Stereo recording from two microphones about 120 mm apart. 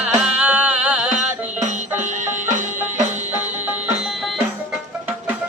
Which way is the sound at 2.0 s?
90° right.